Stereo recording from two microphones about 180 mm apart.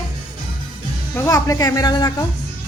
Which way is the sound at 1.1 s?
15° left (ahead or behind).